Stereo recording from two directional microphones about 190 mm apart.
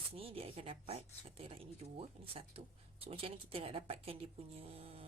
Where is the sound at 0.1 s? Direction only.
30° right (ahead or behind).